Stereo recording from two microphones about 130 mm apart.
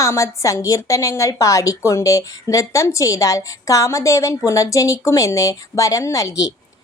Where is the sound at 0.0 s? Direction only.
25° left (ahead or behind).